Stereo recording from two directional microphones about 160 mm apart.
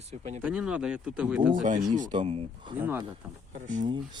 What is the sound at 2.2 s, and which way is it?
Speech, 35° right (ahead or behind).